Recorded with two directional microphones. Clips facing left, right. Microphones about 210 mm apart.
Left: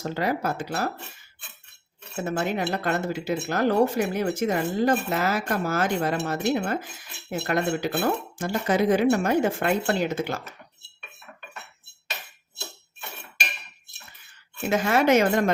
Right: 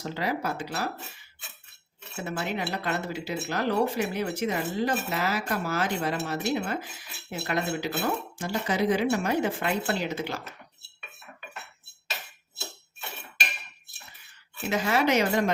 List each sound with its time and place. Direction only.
0.0 s speech: 50° left (ahead or behind)
2.2 s speech: 45° left (ahead or behind)
14.7 s speech: 50° left (ahead or behind)